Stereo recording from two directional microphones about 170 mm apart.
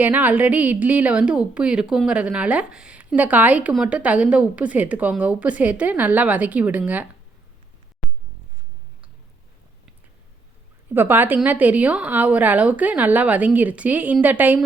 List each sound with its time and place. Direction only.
0.0 s a woman's voice: 10° right (ahead or behind)
10.9 s a woman's voice: 10° right (ahead or behind)